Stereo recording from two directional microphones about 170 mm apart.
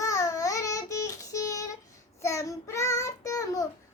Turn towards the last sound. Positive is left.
turn(degrees=20)  # may be behind; listen again after turning